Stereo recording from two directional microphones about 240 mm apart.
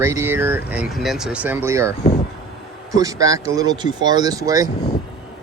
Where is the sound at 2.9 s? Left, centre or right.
Centre.